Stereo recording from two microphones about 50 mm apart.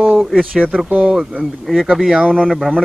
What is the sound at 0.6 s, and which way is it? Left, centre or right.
Speech, centre.